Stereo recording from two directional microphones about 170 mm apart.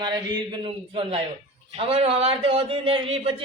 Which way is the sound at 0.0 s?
25° right (ahead or behind).